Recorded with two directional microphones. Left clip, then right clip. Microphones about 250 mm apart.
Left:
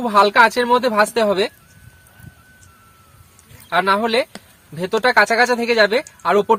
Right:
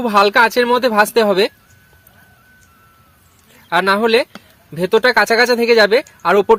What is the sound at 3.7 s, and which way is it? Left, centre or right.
Speech, right.